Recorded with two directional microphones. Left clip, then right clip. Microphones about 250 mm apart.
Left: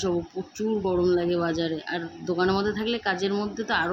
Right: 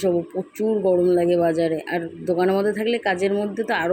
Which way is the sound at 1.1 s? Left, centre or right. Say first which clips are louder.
Right 6 dB; centre.